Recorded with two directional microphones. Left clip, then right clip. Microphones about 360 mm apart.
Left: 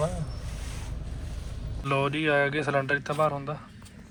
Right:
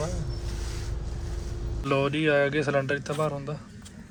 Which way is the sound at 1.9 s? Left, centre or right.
Centre.